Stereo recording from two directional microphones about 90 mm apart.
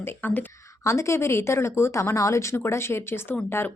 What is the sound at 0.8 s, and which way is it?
A woman's voice, 35° left (ahead or behind).